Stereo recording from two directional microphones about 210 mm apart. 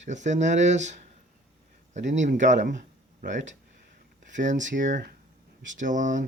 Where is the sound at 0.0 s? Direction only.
35° right (ahead or behind).